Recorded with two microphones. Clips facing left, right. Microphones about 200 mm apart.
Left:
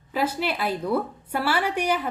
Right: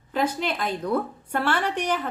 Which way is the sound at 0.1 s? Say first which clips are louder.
Even; 5° left (ahead or behind).